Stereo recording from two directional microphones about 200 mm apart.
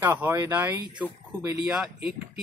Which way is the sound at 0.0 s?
10° right (ahead or behind).